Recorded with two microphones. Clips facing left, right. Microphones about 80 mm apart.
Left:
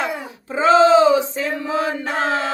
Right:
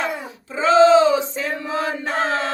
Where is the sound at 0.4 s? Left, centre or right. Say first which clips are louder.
Left 3 dB; left.